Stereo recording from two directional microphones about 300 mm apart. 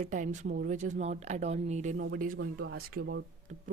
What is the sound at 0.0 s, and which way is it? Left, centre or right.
Speech, right.